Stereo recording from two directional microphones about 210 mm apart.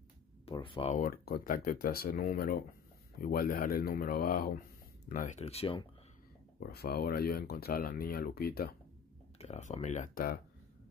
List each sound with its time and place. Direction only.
0.5 s speech: 25° left (ahead or behind)
0.9 s speech: 45° left (ahead or behind); by 5.9 s 25° left (ahead or behind)
6.6 s speech: 50° left (ahead or behind)
9.4 s speech: 35° left (ahead or behind)